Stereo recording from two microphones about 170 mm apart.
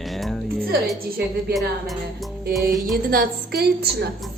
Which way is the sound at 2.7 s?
Centre (ahead or behind).